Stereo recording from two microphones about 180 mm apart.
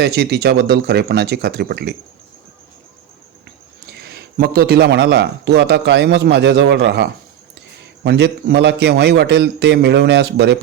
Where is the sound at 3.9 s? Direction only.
65° right (ahead or behind).